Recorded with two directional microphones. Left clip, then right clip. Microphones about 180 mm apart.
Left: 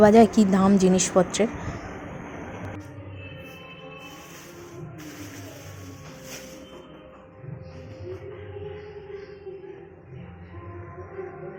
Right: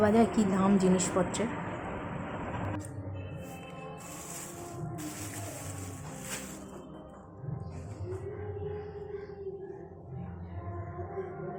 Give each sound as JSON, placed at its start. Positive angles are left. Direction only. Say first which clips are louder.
{"t": 0.0, "sound": "speech", "louder": "left 10 dB", "side_deg": 30}